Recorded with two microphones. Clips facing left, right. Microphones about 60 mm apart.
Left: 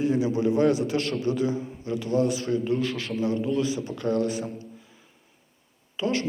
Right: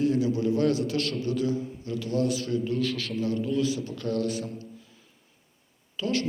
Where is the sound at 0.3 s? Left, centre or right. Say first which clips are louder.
Left 3 dB; left.